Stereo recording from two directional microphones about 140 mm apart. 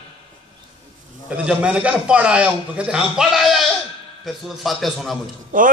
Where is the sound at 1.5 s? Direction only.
5° right (ahead or behind).